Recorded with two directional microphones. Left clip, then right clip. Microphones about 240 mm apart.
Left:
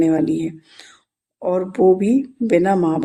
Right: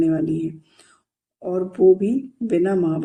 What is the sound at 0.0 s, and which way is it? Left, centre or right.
Speech, centre.